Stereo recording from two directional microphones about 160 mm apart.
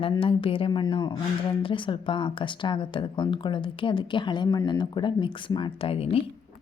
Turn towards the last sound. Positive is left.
turn(degrees=35)  # may be behind; listen again after turning